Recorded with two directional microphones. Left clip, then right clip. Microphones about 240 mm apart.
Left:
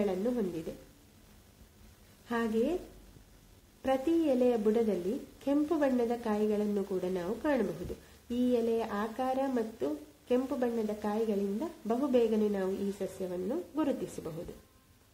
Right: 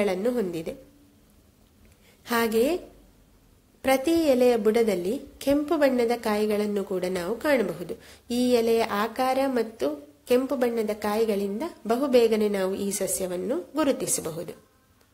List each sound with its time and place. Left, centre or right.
0.0 s a woman's voice: right
2.2 s a woman's voice: right
3.8 s a woman's voice: centre